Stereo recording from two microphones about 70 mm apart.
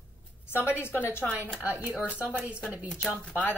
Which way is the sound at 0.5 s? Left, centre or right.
Left.